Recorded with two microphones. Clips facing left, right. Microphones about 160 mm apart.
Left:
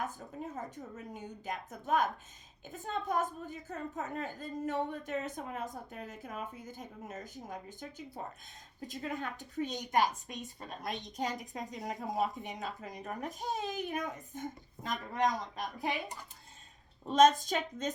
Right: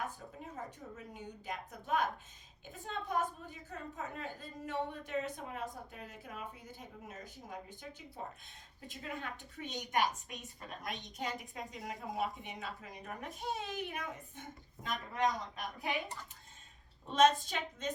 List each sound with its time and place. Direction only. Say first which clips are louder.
0.5 s a woman's voice: left 3 dB; 45° left (ahead or behind)
17.1 s a woman's voice: left 4 dB; 40° left (ahead or behind)